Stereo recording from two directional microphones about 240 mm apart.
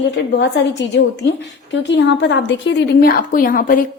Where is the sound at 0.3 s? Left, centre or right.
Left.